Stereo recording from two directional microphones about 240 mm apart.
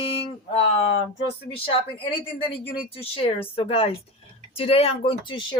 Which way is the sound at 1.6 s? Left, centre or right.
Left.